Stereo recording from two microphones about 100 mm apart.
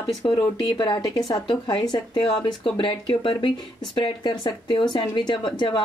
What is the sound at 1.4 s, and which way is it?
Speech, 45° left (ahead or behind).